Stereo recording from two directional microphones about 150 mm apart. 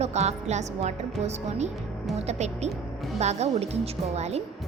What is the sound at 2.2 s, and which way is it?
A woman's voice, 50° right (ahead or behind).